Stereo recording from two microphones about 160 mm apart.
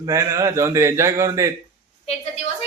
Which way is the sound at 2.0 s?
40° left (ahead or behind).